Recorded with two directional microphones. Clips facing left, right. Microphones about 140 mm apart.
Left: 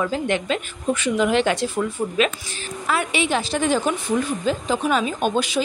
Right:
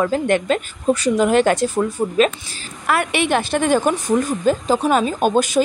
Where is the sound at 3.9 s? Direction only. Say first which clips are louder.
Right 4 dB; 40° right (ahead or behind).